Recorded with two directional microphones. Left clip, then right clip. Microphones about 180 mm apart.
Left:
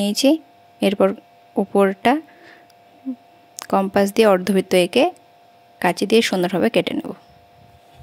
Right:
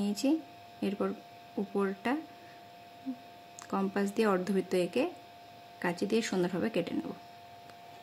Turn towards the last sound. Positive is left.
turn(degrees=55)  # may be behind; listen again after turning